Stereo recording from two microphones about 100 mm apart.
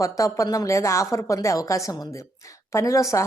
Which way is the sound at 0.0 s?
30° left (ahead or behind).